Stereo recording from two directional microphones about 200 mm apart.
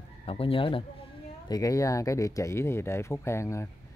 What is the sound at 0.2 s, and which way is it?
A man's voice, 30° left (ahead or behind).